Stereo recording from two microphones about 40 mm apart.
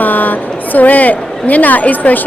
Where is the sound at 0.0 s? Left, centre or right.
Left.